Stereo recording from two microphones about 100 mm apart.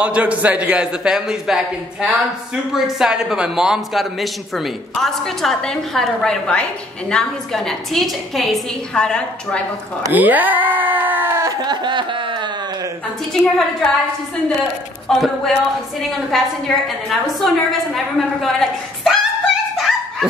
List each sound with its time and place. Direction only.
0.0 s a man's voice: 15° right (ahead or behind); by 9.6 s 10° left (ahead or behind)
10.1 s speech: 15° right (ahead or behind)
11.6 s a sound: 50° right (ahead or behind)
13.3 s a man's voice: centre (ahead or behind)
15.0 s a man's voice: centre (ahead or behind)
19.8 s dog: 5° right (ahead or behind)